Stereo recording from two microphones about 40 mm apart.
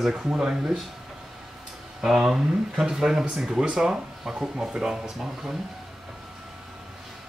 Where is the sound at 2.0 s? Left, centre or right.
Centre.